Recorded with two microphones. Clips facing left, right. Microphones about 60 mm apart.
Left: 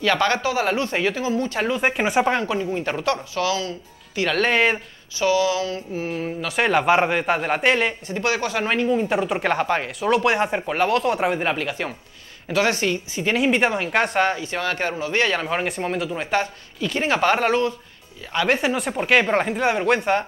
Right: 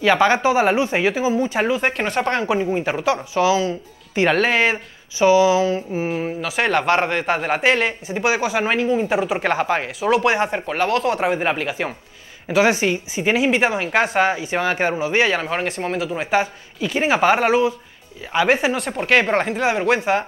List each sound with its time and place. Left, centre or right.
0.0 s speech: centre
1.8 s speech: centre
2.4 s speech: right
2.8 s speech: centre; by 4.4 s right
4.4 s speech: centre
5.2 s speech: right
6.4 s speech: centre
8.1 s speech: centre
13.4 s speech: centre